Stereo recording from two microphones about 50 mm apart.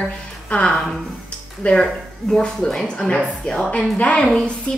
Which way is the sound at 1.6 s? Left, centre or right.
Left.